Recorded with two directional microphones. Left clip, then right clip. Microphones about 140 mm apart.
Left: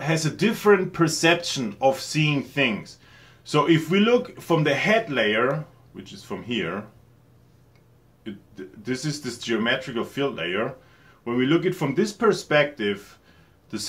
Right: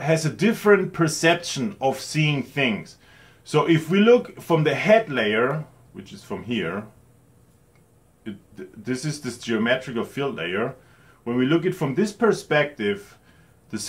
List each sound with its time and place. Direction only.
0.0 s speech: 20° right (ahead or behind)
8.2 s speech: 25° right (ahead or behind)